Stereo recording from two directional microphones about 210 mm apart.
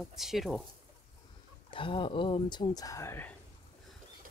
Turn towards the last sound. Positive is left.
turn(degrees=10)  # may be behind; listen again after turning